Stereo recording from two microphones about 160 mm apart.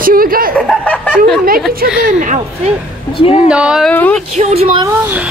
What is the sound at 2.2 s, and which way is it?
Speech, 50° right (ahead or behind).